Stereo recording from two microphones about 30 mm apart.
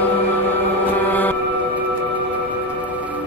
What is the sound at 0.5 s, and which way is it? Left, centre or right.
Music, left.